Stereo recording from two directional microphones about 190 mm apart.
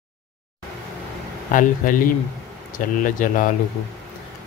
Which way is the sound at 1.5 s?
45° left (ahead or behind).